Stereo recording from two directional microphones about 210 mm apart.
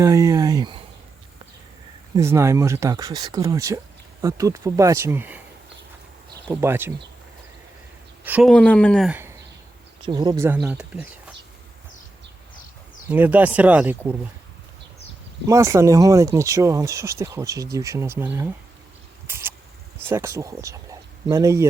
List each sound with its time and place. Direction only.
0.0 s speech: 15° right (ahead or behind)
2.1 s speech: 15° right (ahead or behind)
6.5 s speech: 10° right (ahead or behind)
8.2 s speech: 10° right (ahead or behind)
8.4 s speech: 5° left (ahead or behind)
10.0 s speech: 20° right (ahead or behind)
13.1 s speech: 10° right (ahead or behind)
15.4 s speech: 15° right (ahead or behind)
19.3 s a sound: 10° right (ahead or behind)
20.0 s speech: 10° right (ahead or behind)